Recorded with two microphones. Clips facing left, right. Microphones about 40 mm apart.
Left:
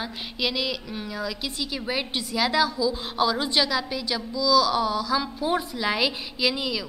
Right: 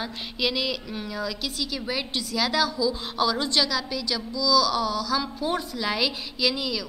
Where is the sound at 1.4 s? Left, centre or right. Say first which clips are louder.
Even; centre.